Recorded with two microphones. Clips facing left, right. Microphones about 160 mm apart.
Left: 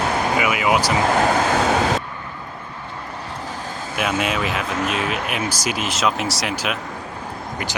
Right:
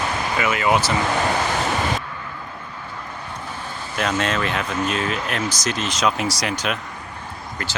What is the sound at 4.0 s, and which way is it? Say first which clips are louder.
Speech: even; 5° left (ahead or behind).